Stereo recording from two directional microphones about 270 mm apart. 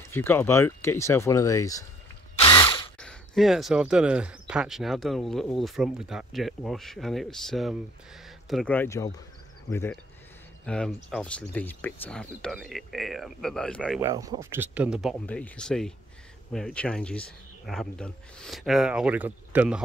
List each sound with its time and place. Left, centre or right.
0.1 s speech: centre
2.3 s drill: centre
3.0 s speech: centre
13.9 s speech: centre